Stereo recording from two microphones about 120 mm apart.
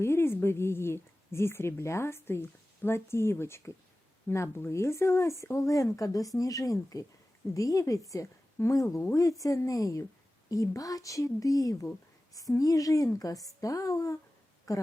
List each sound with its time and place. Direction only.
0.0 s speech: 20° left (ahead or behind)